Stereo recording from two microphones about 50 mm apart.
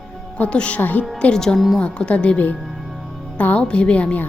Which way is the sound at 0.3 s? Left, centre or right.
Left.